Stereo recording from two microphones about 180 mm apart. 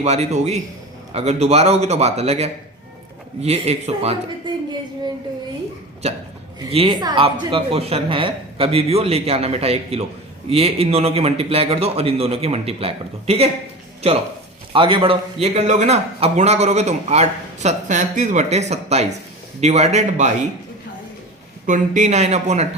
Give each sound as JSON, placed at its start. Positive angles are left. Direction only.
{"t": 0.0, "sound": "a man's voice", "side_deg": -35}
{"t": 6.7, "sound": "a man's voice", "side_deg": -30}
{"t": 21.7, "sound": "a man's voice", "side_deg": -45}